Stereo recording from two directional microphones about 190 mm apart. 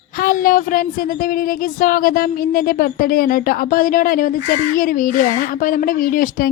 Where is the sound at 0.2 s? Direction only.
45° left (ahead or behind).